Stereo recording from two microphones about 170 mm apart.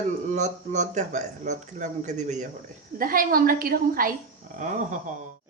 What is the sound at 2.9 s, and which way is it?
A woman's voice, 55° right (ahead or behind).